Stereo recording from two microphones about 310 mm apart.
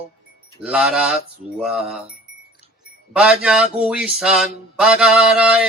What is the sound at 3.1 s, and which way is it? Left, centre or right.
Mantra, centre.